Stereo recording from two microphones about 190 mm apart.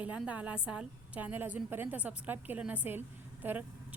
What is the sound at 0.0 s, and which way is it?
A woman's voice, 5° right (ahead or behind).